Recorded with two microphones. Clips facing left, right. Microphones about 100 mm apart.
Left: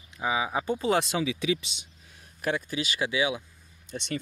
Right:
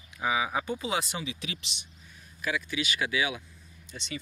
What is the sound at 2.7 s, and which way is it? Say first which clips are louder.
Speech: left 1 dB; 35° left (ahead or behind).